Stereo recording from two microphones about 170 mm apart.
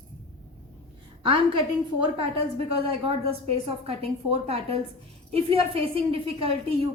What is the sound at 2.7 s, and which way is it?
A woman's voice, 35° right (ahead or behind).